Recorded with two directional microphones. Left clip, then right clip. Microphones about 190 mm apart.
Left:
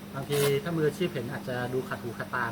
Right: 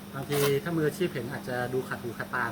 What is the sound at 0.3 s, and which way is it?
Speech, 20° right (ahead or behind).